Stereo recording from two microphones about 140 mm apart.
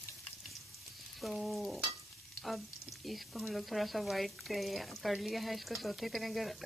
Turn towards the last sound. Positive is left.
turn(degrees=0)  # may be behind; listen again after turning